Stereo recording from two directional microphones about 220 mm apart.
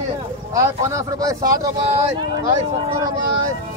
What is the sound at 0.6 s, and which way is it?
Speech, 15° right (ahead or behind).